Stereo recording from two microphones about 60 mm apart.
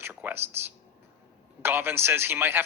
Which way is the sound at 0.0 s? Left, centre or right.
Right.